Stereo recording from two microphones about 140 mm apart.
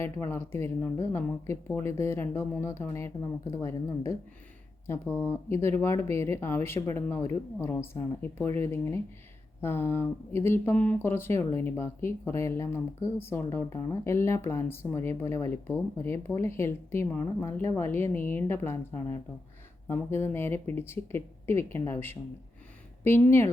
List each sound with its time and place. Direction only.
0.0 s speech: 15° left (ahead or behind)